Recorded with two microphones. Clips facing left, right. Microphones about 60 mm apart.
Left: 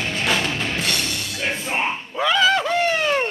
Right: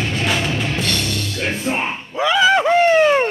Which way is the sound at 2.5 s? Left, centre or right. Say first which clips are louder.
Right 7 dB; right.